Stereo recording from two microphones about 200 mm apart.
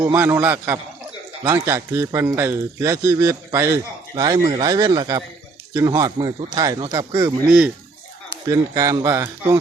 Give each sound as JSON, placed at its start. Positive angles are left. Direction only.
{"t": 0.0, "sound": "a man's voice", "side_deg": -10}